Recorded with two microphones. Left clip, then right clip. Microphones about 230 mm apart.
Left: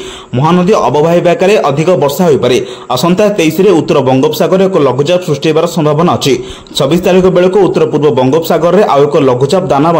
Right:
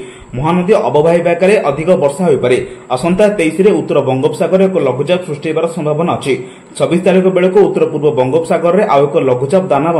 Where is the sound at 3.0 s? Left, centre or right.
Left.